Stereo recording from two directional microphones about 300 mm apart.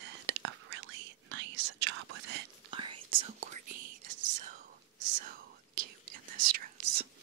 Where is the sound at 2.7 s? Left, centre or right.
Centre.